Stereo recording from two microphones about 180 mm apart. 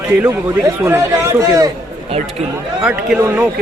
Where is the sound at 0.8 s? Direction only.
15° right (ahead or behind).